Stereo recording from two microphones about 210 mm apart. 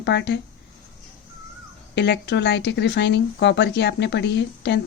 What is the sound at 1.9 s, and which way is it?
Speech, 55° left (ahead or behind).